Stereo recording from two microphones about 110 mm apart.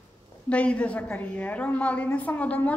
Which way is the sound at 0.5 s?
10° left (ahead or behind).